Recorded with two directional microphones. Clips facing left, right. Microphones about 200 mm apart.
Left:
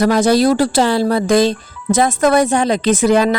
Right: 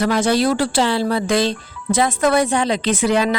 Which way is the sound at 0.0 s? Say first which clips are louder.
Left 5 dB; 40° left (ahead or behind).